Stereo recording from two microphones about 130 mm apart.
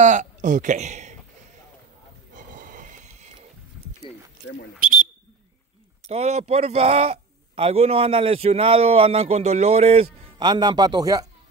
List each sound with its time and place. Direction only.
0.0 s speech: 70° right (ahead or behind)
2.3 s a sound: 90° right; by 3.3 s 70° right (ahead or behind)
6.0 s a man's voice: 55° right (ahead or behind)
10.4 s a man's voice: 35° right (ahead or behind)